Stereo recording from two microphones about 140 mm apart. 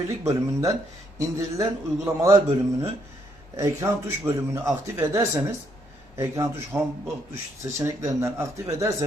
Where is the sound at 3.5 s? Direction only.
20° right (ahead or behind).